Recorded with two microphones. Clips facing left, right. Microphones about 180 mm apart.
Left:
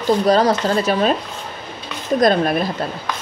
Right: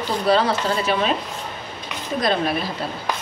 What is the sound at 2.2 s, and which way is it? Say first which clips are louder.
Speech: left 6 dB; 45° left (ahead or behind).